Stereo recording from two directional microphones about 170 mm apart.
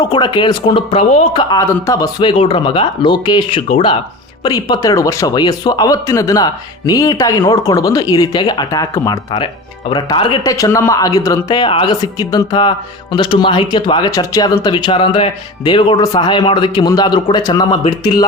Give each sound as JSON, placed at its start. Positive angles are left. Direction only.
{"t": 0.0, "sound": "speech", "side_deg": 25}